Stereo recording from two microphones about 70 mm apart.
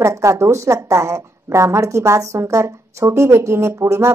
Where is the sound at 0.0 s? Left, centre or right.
Right.